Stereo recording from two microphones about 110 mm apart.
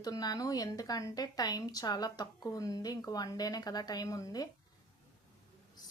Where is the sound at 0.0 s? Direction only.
35° left (ahead or behind).